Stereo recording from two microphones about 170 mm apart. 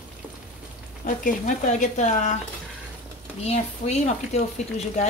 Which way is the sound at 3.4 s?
40° left (ahead or behind).